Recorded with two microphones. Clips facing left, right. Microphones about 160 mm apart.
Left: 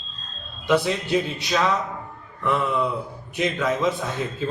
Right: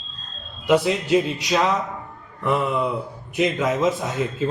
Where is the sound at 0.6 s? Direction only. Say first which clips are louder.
Right 3 dB; 10° right (ahead or behind).